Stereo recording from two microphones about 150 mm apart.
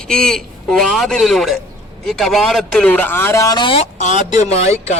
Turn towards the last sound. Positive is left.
turn(degrees=45)  # may be behind; listen again after turning